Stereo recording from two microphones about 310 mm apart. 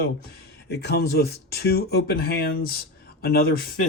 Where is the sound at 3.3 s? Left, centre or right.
Left.